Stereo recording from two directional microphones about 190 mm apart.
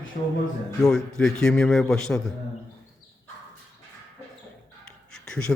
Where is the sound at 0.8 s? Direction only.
5° left (ahead or behind).